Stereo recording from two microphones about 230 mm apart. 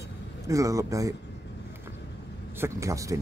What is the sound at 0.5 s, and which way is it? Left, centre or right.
Speech, centre.